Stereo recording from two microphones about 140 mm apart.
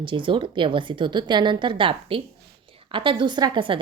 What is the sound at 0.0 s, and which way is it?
A woman's voice, 35° right (ahead or behind).